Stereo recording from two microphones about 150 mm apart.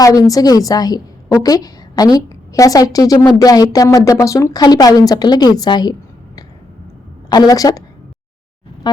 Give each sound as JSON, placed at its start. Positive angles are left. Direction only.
{"t": 0.0, "sound": "a woman's voice", "side_deg": 25}